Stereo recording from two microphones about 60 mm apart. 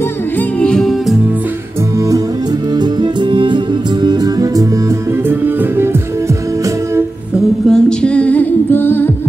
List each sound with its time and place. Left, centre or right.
0.7 s music: centre
2.0 s music: right
4.2 s music: right
5.3 s music: right
7.6 s humming: centre; by 9.1 s left